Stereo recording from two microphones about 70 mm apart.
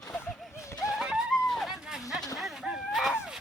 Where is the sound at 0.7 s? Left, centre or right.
Left.